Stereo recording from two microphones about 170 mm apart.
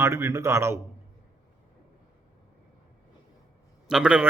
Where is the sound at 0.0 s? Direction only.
15° right (ahead or behind).